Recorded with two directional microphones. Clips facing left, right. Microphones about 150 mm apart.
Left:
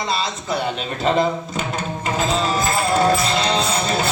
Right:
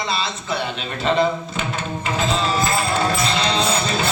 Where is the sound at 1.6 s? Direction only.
40° left (ahead or behind).